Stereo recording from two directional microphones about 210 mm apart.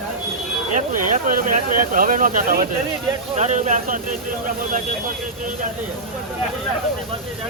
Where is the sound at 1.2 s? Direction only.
40° right (ahead or behind).